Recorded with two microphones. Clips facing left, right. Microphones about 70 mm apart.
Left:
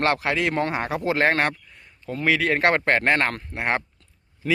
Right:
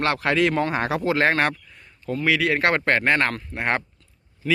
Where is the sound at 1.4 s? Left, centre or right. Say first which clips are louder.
Right 1 dB; centre.